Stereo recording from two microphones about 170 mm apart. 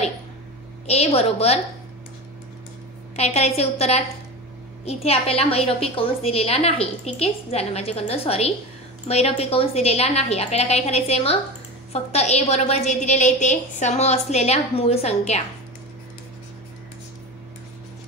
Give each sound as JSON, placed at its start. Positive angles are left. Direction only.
{"t": 0.8, "sound": "a woman's voice", "side_deg": 40}
{"t": 3.2, "sound": "a woman's voice", "side_deg": 40}